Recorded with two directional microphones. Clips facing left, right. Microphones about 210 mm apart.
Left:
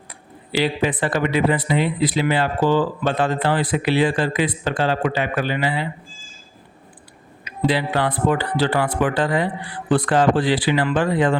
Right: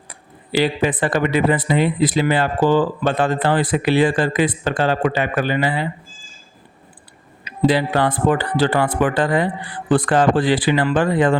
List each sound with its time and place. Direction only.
0.1 s speech: 50° right (ahead or behind)
7.4 s speech: 45° right (ahead or behind)